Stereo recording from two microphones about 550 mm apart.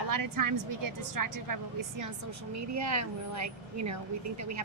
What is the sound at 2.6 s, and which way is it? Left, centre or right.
A woman's voice, right.